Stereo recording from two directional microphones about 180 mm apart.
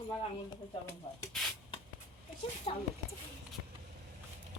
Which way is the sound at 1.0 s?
40° left (ahead or behind).